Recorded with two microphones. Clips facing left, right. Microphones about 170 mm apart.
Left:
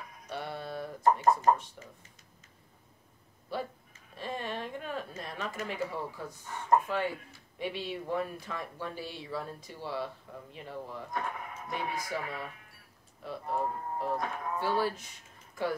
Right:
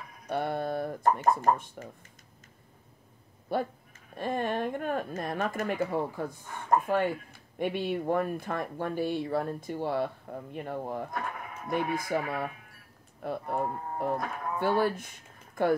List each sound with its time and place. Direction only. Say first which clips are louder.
0.3 s speech: right 8 dB; 50° right (ahead or behind)
3.5 s speech: right 6 dB; 55° right (ahead or behind)
13.2 s livestock: right 2 dB; 55° right (ahead or behind)